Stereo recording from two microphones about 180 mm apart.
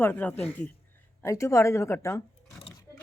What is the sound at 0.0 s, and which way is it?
Speech, 10° left (ahead or behind).